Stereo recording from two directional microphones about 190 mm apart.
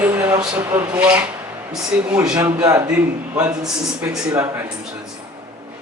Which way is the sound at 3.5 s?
5° right (ahead or behind).